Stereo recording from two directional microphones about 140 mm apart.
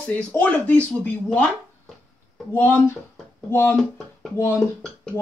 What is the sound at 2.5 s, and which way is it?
Speech, 15° left (ahead or behind).